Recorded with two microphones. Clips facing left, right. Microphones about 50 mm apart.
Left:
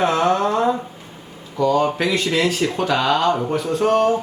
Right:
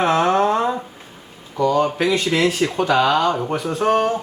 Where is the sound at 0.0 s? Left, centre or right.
Right.